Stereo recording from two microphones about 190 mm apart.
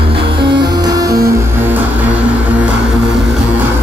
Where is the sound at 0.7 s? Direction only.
20° right (ahead or behind).